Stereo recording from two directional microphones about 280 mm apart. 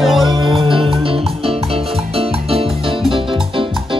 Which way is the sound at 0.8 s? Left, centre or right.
Centre.